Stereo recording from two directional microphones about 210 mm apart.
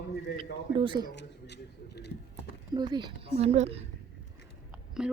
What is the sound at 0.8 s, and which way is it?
Speech, 20° right (ahead or behind).